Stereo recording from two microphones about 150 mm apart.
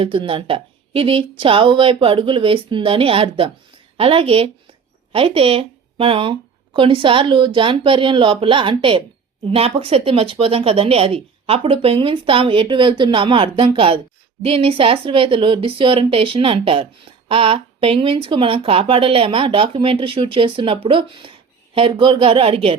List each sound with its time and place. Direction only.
0.0 s speech: 35° right (ahead or behind)